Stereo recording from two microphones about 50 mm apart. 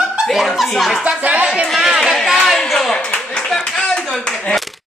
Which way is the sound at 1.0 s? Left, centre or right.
Right.